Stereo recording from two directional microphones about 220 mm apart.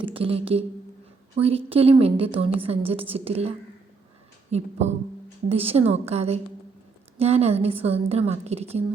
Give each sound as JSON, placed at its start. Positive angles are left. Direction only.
{"t": 0.0, "sound": "a woman's voice", "side_deg": -25}
{"t": 4.5, "sound": "music", "side_deg": -30}
{"t": 5.5, "sound": "a woman's voice", "side_deg": -25}